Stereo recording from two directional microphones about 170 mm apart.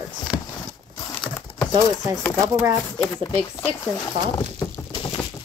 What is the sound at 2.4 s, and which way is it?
Speech, 20° right (ahead or behind).